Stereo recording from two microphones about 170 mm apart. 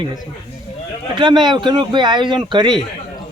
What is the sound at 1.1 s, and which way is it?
Speech, 25° right (ahead or behind).